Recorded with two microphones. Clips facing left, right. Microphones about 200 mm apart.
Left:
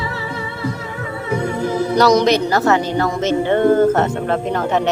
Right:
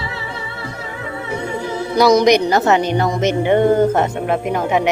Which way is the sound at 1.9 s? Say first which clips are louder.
Right 2 dB; 10° right (ahead or behind).